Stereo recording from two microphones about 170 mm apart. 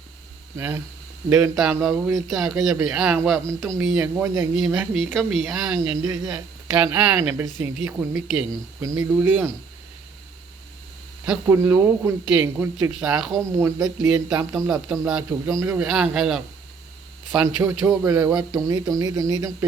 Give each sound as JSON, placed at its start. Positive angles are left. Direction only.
{"t": 0.5, "sound": "a man's voice", "side_deg": -15}
{"t": 1.9, "sound": "a man's voice", "side_deg": -15}
{"t": 2.2, "sound": "a man's voice", "side_deg": 0}
{"t": 5.8, "sound": "speech", "side_deg": -15}
{"t": 6.7, "sound": "a man's voice", "side_deg": -10}
{"t": 11.4, "sound": "a man's voice", "side_deg": -15}
{"t": 13.5, "sound": "speech", "side_deg": -15}
{"t": 14.3, "sound": "a man's voice", "side_deg": -5}
{"t": 17.4, "sound": "a man's voice", "side_deg": -15}
{"t": 18.7, "sound": "speech", "side_deg": -20}